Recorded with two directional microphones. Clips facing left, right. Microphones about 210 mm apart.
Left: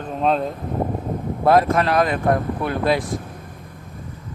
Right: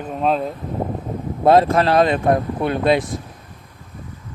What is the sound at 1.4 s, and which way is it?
Speech, 25° right (ahead or behind).